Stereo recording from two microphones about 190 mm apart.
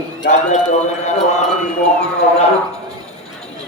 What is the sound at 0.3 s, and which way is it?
Speech, 35° left (ahead or behind).